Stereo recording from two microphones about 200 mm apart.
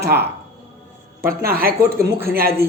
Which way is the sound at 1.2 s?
50° right (ahead or behind).